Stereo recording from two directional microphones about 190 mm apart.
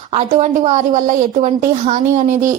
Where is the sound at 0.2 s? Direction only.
40° right (ahead or behind).